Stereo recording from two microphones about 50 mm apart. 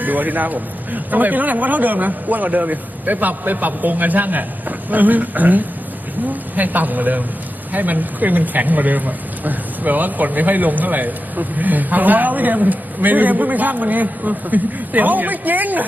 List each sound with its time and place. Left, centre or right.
0.0 s speech: right